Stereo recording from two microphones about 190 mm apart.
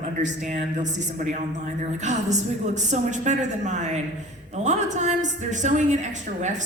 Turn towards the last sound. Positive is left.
turn(degrees=-40)  # may be behind; listen again after turning